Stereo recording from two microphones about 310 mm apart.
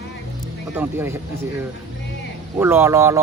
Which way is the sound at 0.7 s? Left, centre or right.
Centre.